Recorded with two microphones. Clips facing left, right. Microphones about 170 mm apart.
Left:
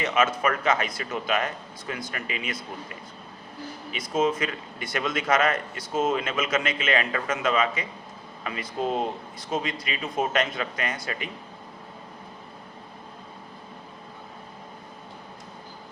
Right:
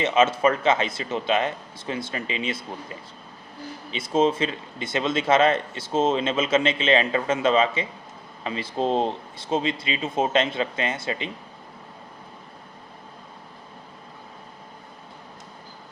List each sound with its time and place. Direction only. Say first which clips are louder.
0.0 s speech: right 4 dB; 25° right (ahead or behind)